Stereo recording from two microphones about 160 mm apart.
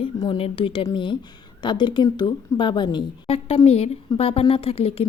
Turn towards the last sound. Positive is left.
turn(degrees=40)  # may be behind; listen again after turning